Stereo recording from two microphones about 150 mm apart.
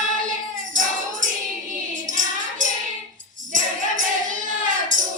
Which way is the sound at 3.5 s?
60° right (ahead or behind).